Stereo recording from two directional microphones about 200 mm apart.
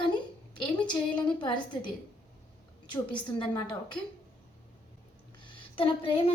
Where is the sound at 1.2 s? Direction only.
25° left (ahead or behind).